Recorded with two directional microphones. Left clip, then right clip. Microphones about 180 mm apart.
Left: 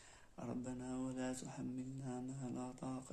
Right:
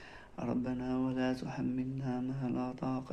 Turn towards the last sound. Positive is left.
turn(degrees=25)  # may be behind; listen again after turning